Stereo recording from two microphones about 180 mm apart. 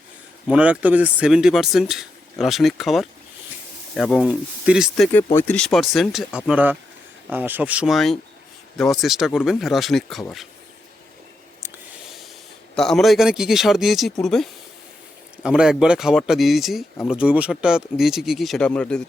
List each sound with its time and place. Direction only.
0.4 s speech: 5° right (ahead or behind)
12.7 s speech: centre (ahead or behind)
15.4 s speech: 5° right (ahead or behind)